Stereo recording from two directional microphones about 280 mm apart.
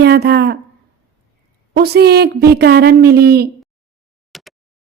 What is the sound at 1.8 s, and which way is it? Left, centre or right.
Speech, right.